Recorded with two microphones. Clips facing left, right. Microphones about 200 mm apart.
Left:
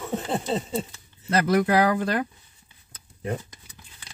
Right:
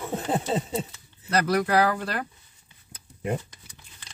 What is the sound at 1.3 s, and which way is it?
Speech, 25° left (ahead or behind).